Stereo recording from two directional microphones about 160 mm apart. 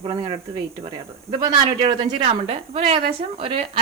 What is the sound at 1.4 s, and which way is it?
A woman's voice, 25° right (ahead or behind).